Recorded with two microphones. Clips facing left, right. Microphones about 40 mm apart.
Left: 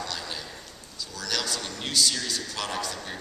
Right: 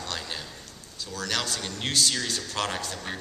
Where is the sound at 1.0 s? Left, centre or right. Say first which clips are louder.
Right 1 dB; right.